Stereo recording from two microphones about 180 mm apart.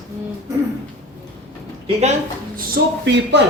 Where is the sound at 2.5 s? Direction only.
65° right (ahead or behind).